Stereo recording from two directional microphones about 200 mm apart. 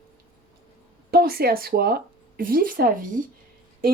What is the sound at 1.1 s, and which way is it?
Speech, 50° right (ahead or behind).